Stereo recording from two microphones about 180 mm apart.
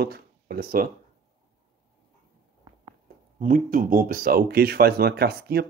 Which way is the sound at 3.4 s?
50° right (ahead or behind).